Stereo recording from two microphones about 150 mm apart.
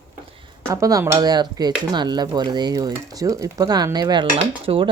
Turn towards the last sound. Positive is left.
turn(degrees=-35)  # may be behind; listen again after turning